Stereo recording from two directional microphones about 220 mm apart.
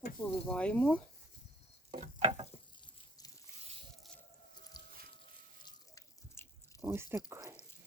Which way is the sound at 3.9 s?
Centre (ahead or behind).